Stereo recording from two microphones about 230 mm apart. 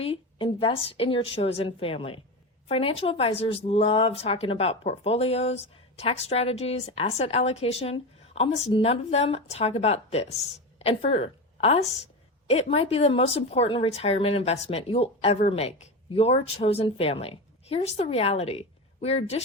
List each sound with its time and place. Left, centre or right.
0.0 s a woman's voice: left